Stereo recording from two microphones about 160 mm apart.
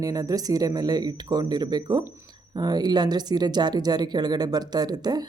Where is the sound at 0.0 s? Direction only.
20° right (ahead or behind).